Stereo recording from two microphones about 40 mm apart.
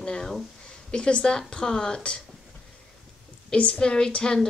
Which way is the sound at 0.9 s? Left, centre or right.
Left.